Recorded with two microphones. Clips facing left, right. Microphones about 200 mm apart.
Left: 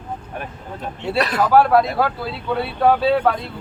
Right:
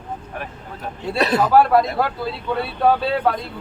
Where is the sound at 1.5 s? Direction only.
Centre (ahead or behind).